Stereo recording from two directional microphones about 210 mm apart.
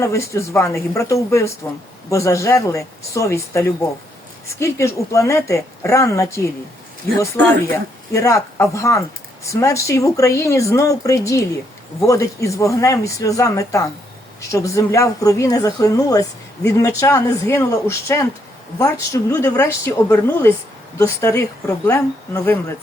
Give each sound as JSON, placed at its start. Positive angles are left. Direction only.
{"t": 0.0, "sound": "speech", "side_deg": 15}